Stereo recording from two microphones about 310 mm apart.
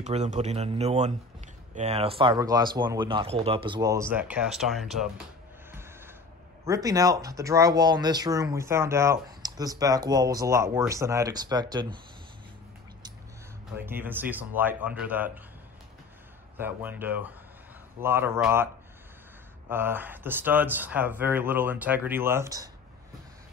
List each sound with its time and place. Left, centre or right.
0.0 s speech: right; by 5.2 s centre
5.7 s a sound: centre
6.6 s speech: centre
13.7 s speech: centre
16.5 s speech: centre
19.7 s speech: centre